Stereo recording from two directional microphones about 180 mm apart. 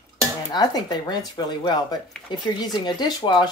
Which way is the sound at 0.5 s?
20° left (ahead or behind).